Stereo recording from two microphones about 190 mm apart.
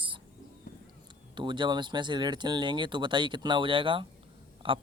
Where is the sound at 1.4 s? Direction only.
25° right (ahead or behind).